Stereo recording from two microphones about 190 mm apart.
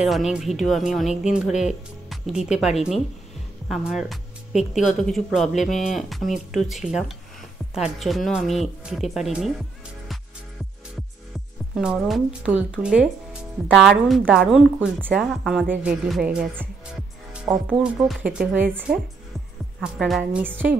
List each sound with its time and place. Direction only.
0.0 s a woman's voice: centre (ahead or behind)
11.7 s speech: 5° right (ahead or behind)